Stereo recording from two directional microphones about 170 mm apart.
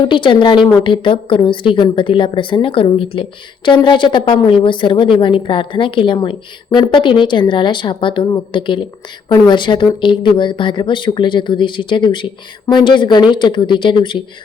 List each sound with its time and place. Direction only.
0.0 s a woman's voice: 30° left (ahead or behind)